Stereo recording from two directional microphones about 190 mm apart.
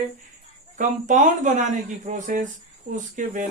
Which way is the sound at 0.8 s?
40° right (ahead or behind).